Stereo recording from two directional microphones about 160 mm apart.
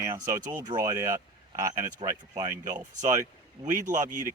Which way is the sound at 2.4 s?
20° right (ahead or behind).